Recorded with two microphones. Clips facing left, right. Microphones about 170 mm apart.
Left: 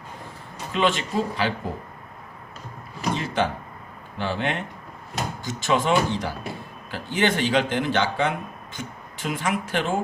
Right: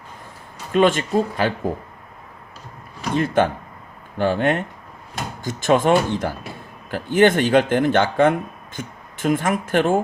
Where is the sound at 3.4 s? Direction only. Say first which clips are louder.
Right 6 dB; 50° right (ahead or behind).